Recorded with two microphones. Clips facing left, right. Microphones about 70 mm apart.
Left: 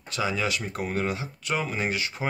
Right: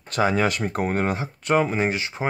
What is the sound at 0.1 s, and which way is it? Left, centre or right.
Speech, right.